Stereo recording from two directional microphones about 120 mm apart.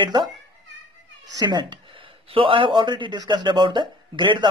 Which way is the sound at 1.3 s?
40° right (ahead or behind).